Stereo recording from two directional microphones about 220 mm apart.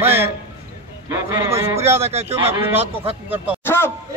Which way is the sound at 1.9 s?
30° right (ahead or behind).